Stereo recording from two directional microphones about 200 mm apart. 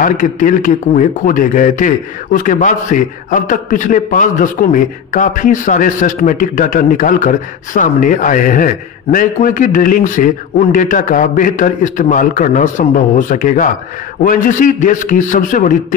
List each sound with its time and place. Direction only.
0.0 s a man's voice: 40° left (ahead or behind)